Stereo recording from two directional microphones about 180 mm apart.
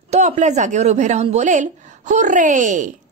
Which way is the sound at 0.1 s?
40° right (ahead or behind).